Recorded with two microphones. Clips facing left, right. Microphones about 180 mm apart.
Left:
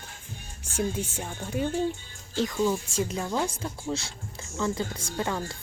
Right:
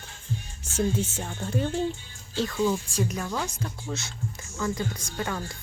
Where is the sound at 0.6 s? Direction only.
10° left (ahead or behind).